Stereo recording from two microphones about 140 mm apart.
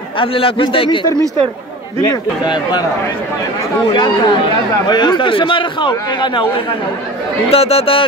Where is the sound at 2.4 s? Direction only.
30° left (ahead or behind).